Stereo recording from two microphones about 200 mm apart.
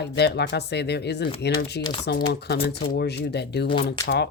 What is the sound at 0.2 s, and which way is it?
Speech, 55° left (ahead or behind).